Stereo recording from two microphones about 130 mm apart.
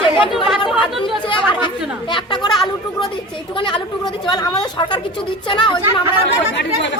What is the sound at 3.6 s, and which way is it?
Speech, 40° left (ahead or behind).